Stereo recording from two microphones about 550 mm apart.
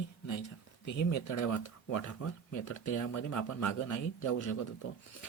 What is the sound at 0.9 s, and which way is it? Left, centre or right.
Speech, left.